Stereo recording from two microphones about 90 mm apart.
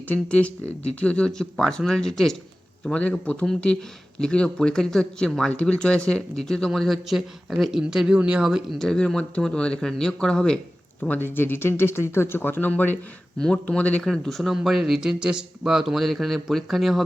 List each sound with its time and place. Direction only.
0.1 s a man's voice: 15° left (ahead or behind)
2.8 s a man's voice: 15° left (ahead or behind); by 8.6 s 10° right (ahead or behind)
8.8 s speech: 5° left (ahead or behind)
11.2 s speech: 25° left (ahead or behind)
14.0 s a man's voice: 5° left (ahead or behind)